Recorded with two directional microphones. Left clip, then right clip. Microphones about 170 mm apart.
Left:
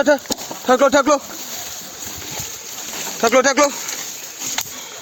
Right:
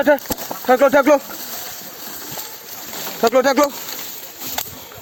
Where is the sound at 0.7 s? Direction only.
30° left (ahead or behind).